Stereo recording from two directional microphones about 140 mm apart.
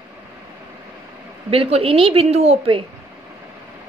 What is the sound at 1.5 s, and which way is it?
A woman's voice, 40° right (ahead or behind).